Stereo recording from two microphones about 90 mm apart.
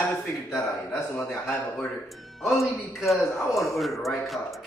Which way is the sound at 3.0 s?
Centre (ahead or behind).